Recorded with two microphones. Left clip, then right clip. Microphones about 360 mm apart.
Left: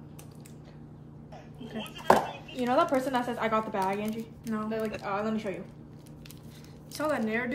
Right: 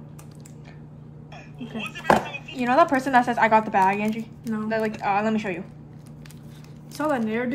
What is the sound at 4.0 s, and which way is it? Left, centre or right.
Speech, centre.